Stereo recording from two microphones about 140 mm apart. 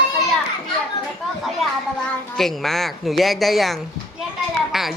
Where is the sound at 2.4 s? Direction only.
Centre (ahead or behind).